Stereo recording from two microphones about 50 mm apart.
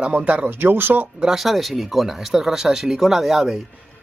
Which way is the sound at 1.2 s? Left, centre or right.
Centre.